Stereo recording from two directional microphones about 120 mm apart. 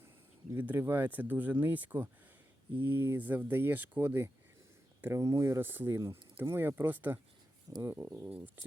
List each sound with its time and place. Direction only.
0.5 s speech: 15° right (ahead or behind)